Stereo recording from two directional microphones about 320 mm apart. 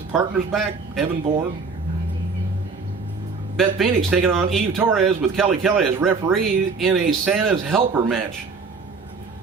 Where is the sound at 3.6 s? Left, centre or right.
Centre.